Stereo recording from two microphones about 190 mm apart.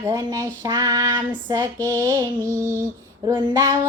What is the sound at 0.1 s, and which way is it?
Female singing, 15° right (ahead or behind).